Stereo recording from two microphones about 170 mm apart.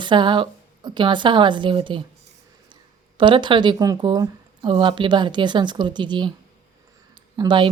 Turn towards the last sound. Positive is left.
turn(degrees=-25)  # may be behind; listen again after turning